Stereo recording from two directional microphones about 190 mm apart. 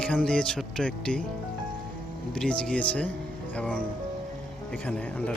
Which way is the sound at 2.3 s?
5° left (ahead or behind).